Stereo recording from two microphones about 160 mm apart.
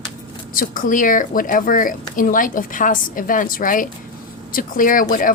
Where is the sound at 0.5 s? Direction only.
60° left (ahead or behind).